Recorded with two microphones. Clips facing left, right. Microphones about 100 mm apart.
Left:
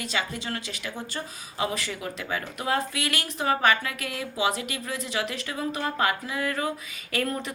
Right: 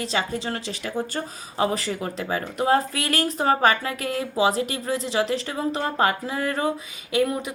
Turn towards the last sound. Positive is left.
turn(degrees=-15)  # may be behind; listen again after turning